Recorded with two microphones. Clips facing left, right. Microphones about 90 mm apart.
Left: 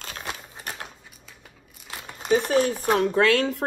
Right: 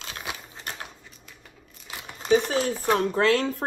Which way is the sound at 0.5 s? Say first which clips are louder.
Left 1 dB; 10° left (ahead or behind).